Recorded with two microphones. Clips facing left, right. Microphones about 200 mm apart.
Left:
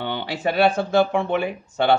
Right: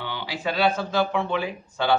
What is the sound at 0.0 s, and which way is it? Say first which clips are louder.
Speech: left 5 dB; 60° left (ahead or behind).